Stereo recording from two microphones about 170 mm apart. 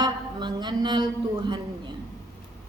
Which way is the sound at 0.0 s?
25° right (ahead or behind).